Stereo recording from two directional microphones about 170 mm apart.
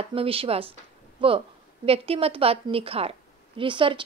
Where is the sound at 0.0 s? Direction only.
35° right (ahead or behind).